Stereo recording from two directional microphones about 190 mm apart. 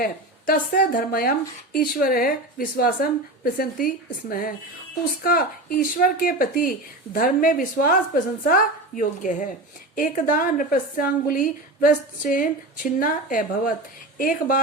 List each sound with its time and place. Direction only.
0.0 s a woman's voice: 50° left (ahead or behind)